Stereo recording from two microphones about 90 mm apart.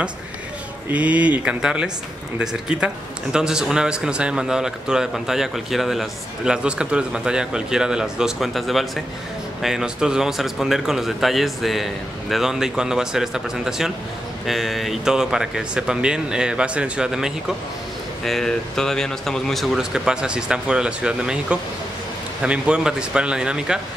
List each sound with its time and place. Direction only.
0.8 s a man's voice: 15° right (ahead or behind)
18.2 s a man's voice: 5° left (ahead or behind)